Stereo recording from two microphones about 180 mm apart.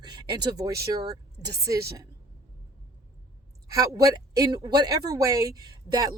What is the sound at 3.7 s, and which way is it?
A woman's voice, 20° right (ahead or behind).